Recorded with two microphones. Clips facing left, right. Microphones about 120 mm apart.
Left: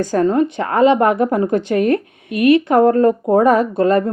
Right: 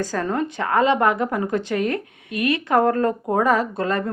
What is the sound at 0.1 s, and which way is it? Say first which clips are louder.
Speech: left 9 dB; 25° left (ahead or behind).